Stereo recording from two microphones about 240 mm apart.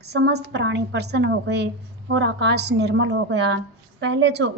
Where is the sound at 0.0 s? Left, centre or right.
Right.